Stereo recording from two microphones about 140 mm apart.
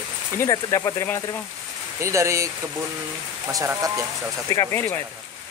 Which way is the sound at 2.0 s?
20° right (ahead or behind).